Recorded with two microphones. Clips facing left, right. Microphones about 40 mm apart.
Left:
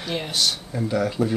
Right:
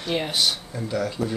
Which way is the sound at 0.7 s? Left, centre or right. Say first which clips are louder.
Left 3 dB; centre.